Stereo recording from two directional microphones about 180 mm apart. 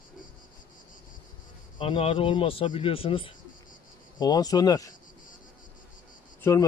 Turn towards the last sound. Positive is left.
turn(degrees=15)  # may be behind; listen again after turning